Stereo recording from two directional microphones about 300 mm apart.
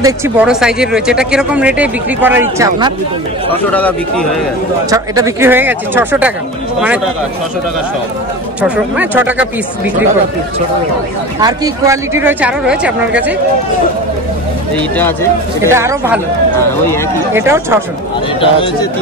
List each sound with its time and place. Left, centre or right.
0.0 s speech: centre
4.8 s a woman's voice: centre
8.5 s speech: centre
11.4 s a woman's voice: centre
14.8 s speech: centre
15.7 s a woman's voice: centre
17.3 s a woman's voice: centre
18.4 s speech: centre